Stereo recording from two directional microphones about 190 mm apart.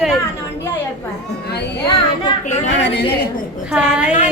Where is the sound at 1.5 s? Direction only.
60° left (ahead or behind).